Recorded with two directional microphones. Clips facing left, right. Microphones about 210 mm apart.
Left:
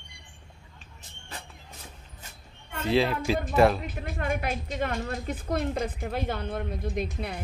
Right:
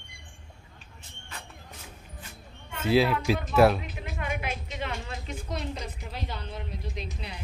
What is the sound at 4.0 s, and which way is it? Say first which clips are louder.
A woman's voice: left 4 dB; 50° left (ahead or behind).